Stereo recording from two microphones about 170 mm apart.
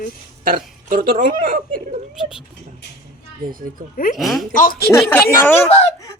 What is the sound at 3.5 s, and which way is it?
Speech, 55° right (ahead or behind).